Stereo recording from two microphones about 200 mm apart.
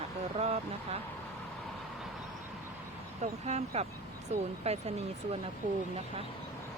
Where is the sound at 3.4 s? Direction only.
35° right (ahead or behind).